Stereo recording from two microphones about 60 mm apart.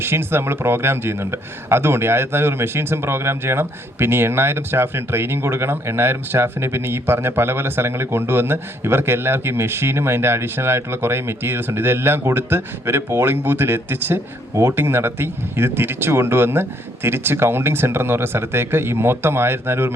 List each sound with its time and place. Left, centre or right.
0.0 s speech: right